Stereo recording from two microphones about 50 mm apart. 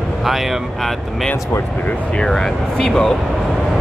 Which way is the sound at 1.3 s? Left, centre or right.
Left.